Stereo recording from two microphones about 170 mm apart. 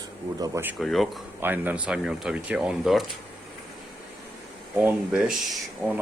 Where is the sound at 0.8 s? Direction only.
Centre (ahead or behind).